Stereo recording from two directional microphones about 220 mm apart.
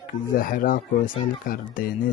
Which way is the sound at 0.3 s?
40° left (ahead or behind).